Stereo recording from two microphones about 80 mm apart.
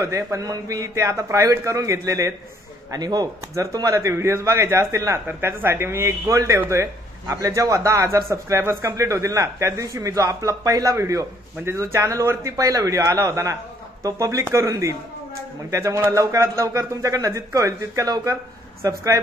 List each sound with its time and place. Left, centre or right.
0.0 s a man's voice: right
2.9 s speech: right
3.5 s a man's voice: right